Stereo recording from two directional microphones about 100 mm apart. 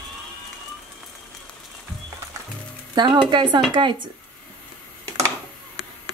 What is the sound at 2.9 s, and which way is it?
Speech, 50° right (ahead or behind).